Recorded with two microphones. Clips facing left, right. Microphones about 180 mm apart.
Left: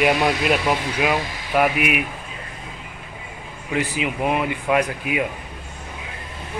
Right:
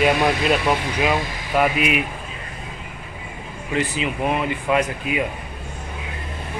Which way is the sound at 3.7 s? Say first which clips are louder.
Even; 10° left (ahead or behind).